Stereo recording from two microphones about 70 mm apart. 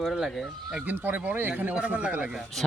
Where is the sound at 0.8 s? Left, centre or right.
Right.